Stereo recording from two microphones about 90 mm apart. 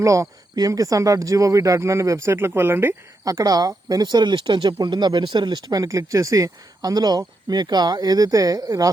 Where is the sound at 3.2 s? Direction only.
40° right (ahead or behind).